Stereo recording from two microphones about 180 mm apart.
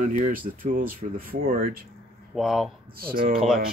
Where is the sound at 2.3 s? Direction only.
Centre (ahead or behind).